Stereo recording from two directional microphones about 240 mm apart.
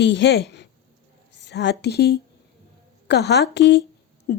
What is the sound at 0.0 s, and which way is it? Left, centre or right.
A woman's voice, left.